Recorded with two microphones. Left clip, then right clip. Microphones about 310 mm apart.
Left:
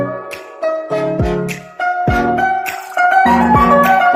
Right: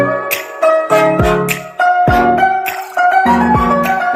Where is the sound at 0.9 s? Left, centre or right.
Right.